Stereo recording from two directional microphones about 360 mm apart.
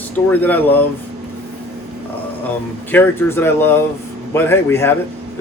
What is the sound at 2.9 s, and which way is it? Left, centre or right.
Speech, centre.